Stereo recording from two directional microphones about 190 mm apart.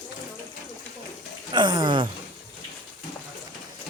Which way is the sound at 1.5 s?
25° right (ahead or behind).